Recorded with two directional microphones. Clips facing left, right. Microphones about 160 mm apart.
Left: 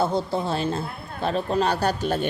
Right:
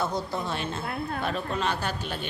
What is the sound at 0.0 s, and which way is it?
Speech, 30° left (ahead or behind).